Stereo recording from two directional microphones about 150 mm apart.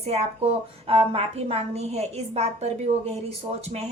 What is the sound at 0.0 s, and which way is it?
A woman's voice, 45° right (ahead or behind).